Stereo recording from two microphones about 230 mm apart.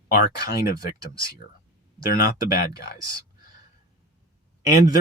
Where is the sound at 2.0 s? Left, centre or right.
Left.